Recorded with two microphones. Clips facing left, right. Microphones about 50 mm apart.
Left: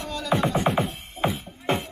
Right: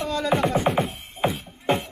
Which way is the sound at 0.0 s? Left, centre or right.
Right.